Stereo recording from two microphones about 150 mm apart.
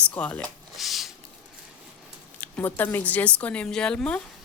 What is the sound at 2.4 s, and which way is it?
Speech, 10° left (ahead or behind).